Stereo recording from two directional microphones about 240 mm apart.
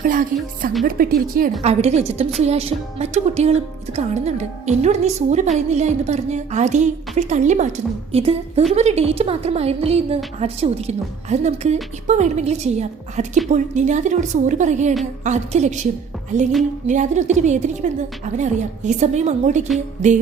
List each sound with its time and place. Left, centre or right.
0.0 s a woman's voice: right